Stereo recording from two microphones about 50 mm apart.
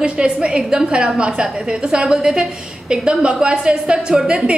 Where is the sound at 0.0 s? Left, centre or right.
Centre.